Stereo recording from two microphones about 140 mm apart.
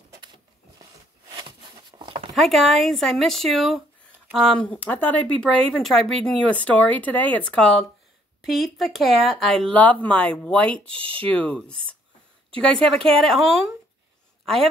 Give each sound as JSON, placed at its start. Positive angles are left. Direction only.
{"t": 1.3, "sound": "patter", "side_deg": -35}
{"t": 2.3, "sound": "speech", "side_deg": 0}